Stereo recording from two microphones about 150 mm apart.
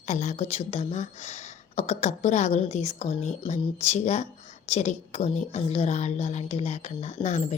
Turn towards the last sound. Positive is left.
turn(degrees=50)  # may be behind; listen again after turning